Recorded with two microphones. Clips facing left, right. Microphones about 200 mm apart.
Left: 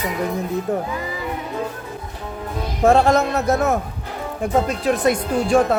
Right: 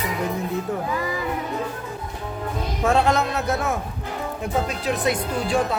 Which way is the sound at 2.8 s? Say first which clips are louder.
Left 5 dB; 50° left (ahead or behind).